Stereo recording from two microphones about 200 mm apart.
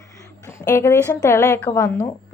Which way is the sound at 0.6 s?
15° left (ahead or behind).